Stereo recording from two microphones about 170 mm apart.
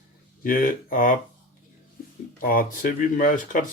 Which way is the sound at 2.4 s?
55° left (ahead or behind).